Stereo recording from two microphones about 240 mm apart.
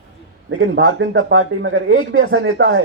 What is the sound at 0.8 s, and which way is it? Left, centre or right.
A man's voice, right.